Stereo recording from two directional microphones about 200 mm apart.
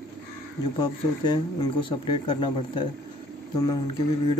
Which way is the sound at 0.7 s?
20° left (ahead or behind).